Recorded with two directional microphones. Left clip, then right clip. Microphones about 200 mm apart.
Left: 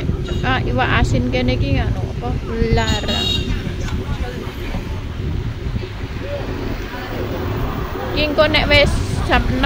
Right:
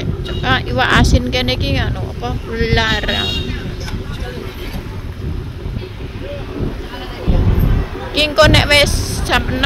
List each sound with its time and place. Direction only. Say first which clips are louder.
0.4 s speech: right 3 dB; 20° right (ahead or behind)
8.1 s a woman's voice: right 4 dB; 25° right (ahead or behind)